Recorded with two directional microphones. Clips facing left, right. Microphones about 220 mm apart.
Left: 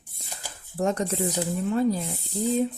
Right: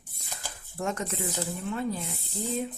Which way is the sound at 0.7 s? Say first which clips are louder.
Left 7 dB; 35° left (ahead or behind).